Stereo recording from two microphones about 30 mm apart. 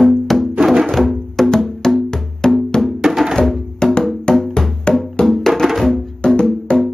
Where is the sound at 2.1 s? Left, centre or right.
Left.